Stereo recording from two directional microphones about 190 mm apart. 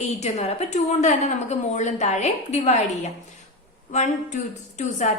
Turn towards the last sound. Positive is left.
turn(degrees=40)  # may be behind; listen again after turning